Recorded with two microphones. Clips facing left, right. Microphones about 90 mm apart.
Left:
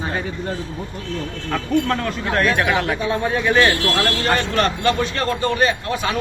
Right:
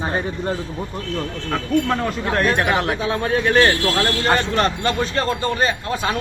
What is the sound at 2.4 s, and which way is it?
Speech, 35° right (ahead or behind).